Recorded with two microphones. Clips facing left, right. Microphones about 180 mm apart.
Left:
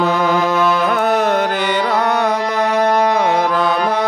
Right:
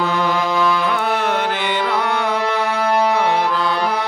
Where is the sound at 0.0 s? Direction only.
40° left (ahead or behind).